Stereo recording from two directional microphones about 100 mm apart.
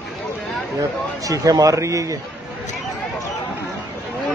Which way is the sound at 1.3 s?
35° right (ahead or behind).